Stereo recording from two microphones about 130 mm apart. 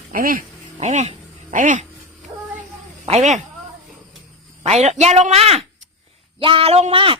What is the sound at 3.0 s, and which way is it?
Speech, 55° right (ahead or behind).